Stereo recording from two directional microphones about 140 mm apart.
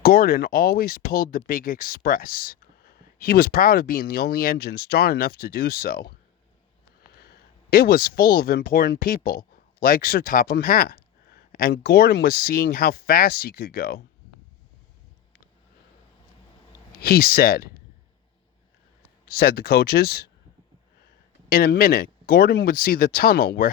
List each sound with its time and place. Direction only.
0.0 s speech: 90° left
7.2 s speech: 90° left
17.0 s speech: 90° left
19.2 s speech: 90° left
21.5 s speech: 90° left